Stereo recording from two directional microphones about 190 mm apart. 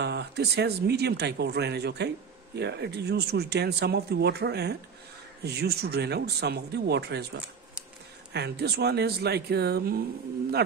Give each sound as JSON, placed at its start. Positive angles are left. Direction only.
{"t": 0.0, "sound": "speech", "side_deg": -60}